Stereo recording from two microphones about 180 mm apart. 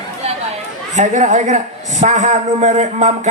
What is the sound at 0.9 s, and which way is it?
A man's voice, 45° right (ahead or behind).